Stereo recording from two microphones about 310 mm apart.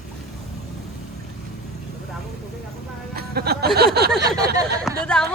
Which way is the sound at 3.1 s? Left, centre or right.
Right.